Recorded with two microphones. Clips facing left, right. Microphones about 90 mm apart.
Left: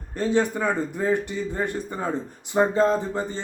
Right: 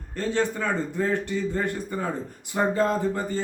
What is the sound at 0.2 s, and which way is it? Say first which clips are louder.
A man's voice: left 3 dB; 15° left (ahead or behind).